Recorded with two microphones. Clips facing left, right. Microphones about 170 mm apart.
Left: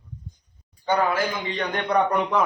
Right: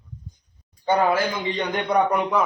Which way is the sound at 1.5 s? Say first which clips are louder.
Right 1 dB; 10° right (ahead or behind).